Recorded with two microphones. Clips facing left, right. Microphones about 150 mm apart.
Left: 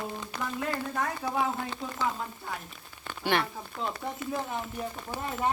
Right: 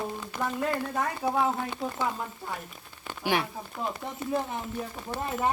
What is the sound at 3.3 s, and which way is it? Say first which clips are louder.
Speech: even; 10° right (ahead or behind).